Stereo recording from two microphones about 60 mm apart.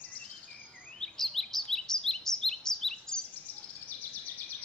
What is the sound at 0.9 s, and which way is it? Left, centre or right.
Bird vocalization, centre.